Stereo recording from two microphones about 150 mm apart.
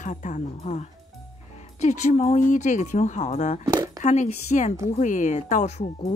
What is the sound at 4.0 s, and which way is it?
Speech, 50° left (ahead or behind).